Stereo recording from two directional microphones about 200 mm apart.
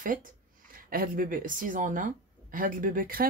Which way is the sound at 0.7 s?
45° right (ahead or behind).